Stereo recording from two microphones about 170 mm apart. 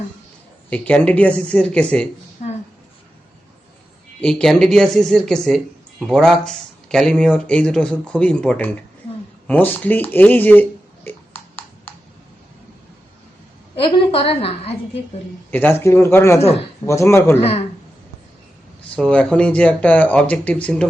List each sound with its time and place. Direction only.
0.7 s speech: 5° left (ahead or behind)
2.4 s a sound: 45° left (ahead or behind)
4.2 s speech: 5° left (ahead or behind)
9.5 s a sound: 10° left (ahead or behind)
13.7 s a woman's voice: 30° left (ahead or behind)
15.4 s speech: 10° left (ahead or behind)
18.9 s speech: 5° left (ahead or behind)